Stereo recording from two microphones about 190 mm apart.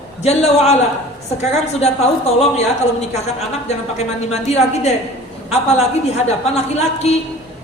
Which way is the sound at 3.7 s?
35° left (ahead or behind).